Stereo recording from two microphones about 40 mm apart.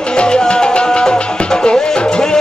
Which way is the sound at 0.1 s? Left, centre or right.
Left.